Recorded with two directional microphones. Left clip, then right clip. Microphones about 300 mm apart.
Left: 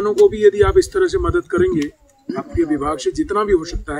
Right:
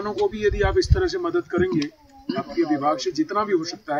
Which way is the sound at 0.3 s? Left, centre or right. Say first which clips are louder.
Left 9 dB; centre.